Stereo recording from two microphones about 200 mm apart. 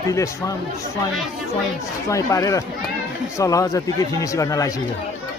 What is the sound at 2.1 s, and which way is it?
Speech, 15° left (ahead or behind).